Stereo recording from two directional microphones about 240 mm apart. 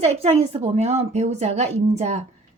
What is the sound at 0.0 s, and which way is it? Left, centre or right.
Speech, right.